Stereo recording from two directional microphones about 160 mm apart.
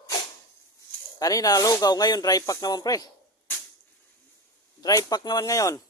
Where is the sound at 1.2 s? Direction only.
20° left (ahead or behind).